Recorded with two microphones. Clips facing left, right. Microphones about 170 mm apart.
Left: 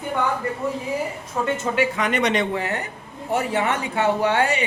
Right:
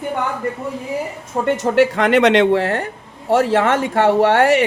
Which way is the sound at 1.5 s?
70° right (ahead or behind).